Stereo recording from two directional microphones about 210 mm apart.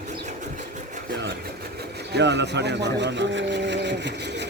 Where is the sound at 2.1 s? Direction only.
55° right (ahead or behind).